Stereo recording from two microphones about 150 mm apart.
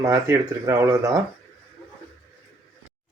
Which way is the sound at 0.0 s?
20° right (ahead or behind).